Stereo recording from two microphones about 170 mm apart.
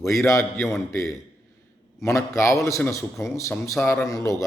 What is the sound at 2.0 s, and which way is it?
Speech, 15° left (ahead or behind).